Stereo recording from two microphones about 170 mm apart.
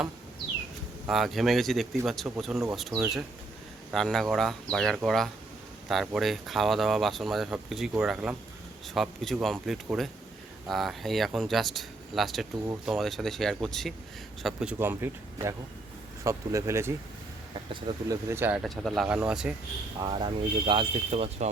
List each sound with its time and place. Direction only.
1.0 s speech: centre (ahead or behind)
17.7 s speech: 30° right (ahead or behind)
18.3 s speech: 10° right (ahead or behind)
18.6 s speech: centre (ahead or behind)
20.0 s speech: 30° right (ahead or behind)